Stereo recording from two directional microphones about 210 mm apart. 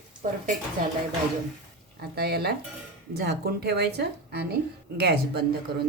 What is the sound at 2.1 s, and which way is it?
A woman's voice, 50° right (ahead or behind).